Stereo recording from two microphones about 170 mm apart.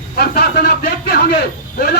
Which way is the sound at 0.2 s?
70° left (ahead or behind).